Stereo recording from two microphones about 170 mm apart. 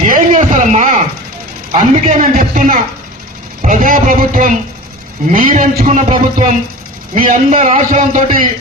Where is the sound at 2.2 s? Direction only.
55° right (ahead or behind).